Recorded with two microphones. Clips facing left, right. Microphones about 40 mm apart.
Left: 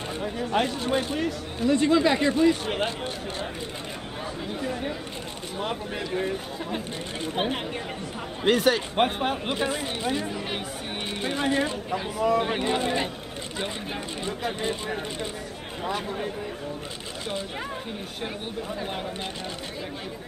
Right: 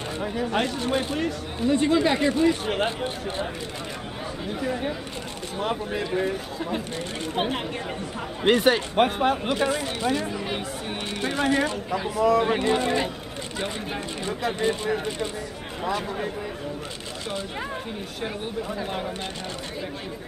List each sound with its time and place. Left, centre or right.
0.2 s speech: centre
2.8 s speech: centre
4.6 s speech: centre
8.5 s speech: centre
8.9 s speech: centre
12.2 s speech: left
12.4 s speech: centre
14.6 s speech: centre